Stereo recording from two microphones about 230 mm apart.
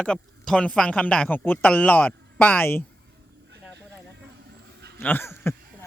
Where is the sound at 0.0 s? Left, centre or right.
Centre.